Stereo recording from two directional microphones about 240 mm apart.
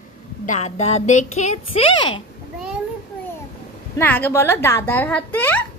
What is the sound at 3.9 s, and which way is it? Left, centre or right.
A woman's voice, centre.